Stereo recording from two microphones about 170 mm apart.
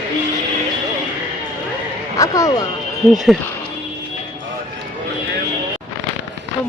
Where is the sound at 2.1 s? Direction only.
20° left (ahead or behind).